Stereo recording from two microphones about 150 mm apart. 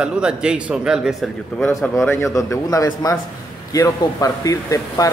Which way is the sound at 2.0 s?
20° left (ahead or behind).